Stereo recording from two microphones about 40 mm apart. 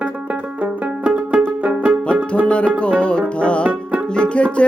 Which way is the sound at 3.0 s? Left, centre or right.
Left.